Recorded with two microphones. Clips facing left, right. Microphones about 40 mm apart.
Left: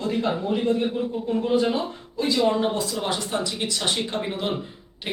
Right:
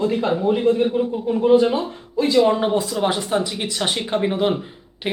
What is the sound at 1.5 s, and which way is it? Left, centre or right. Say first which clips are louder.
Speech: right 6 dB; centre.